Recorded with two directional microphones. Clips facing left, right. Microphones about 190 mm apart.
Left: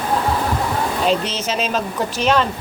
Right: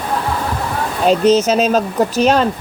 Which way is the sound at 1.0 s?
40° right (ahead or behind).